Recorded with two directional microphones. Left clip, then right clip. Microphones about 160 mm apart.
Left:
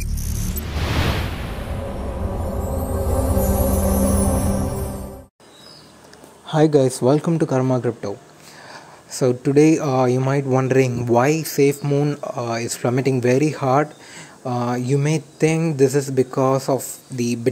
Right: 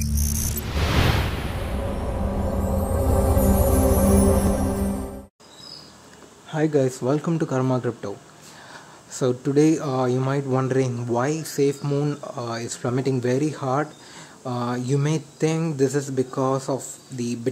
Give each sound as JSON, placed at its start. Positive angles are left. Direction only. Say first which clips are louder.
{"t": 0.2, "sound": "music", "louder": "even", "side_deg": 0}
{"t": 6.5, "sound": "speech", "louder": "left 6 dB", "side_deg": 30}
{"t": 7.2, "sound": "speech", "louder": "left 4 dB", "side_deg": 10}